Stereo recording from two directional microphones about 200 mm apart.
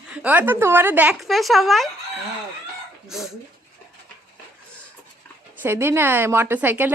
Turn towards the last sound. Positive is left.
turn(degrees=-10)  # may be behind; listen again after turning